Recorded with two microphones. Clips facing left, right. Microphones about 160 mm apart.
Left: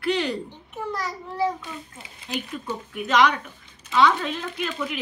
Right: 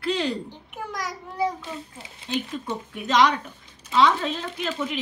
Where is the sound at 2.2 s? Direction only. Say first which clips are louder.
Right 2 dB; 30° right (ahead or behind).